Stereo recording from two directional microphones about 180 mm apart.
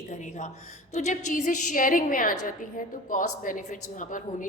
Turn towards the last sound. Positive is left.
turn(degrees=45)  # may be behind; listen again after turning